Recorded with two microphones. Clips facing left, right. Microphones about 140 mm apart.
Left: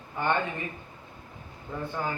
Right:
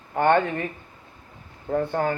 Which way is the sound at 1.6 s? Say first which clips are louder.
Right 9 dB; 60° right (ahead or behind).